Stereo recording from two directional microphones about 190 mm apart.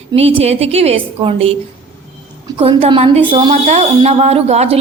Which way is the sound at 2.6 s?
30° right (ahead or behind).